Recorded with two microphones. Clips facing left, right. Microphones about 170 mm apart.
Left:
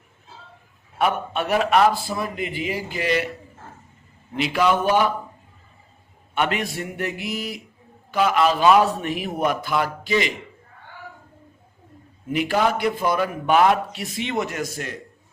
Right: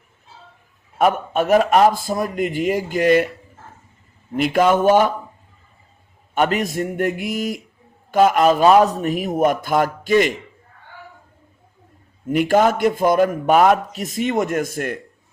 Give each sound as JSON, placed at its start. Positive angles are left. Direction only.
{"t": 0.9, "sound": "a man's voice", "side_deg": -45}
{"t": 4.4, "sound": "a man's voice", "side_deg": -50}
{"t": 6.3, "sound": "a man's voice", "side_deg": -40}
{"t": 12.3, "sound": "a man's voice", "side_deg": -45}